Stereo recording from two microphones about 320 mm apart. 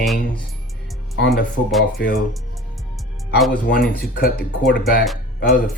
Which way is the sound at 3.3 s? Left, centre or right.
Centre.